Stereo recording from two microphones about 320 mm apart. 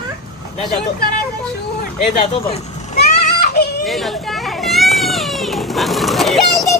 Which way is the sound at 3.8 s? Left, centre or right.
Centre.